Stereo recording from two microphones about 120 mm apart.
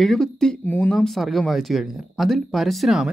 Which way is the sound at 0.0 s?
5° left (ahead or behind).